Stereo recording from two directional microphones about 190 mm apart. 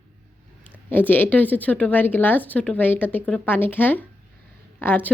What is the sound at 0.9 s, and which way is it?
A woman's voice, 10° left (ahead or behind).